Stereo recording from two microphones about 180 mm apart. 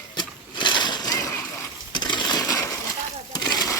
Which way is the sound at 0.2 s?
25° left (ahead or behind).